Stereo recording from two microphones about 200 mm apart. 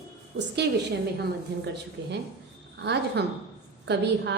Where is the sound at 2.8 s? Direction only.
55° right (ahead or behind).